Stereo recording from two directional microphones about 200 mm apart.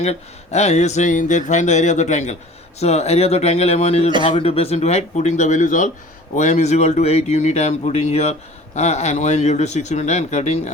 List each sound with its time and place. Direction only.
0.0 s speech: 35° left (ahead or behind)